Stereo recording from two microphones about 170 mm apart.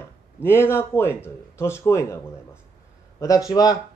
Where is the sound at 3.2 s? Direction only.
20° left (ahead or behind).